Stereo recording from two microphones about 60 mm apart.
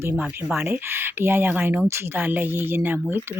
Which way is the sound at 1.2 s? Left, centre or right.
Right.